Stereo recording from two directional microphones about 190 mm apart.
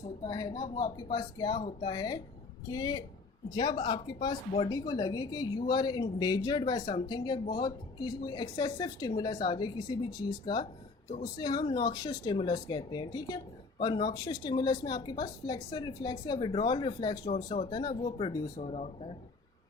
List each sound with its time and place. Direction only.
0.3 s speech: 20° left (ahead or behind)
17.3 s speech: 35° left (ahead or behind)
17.7 s speech: 20° left (ahead or behind)
18.6 s speech: 35° left (ahead or behind)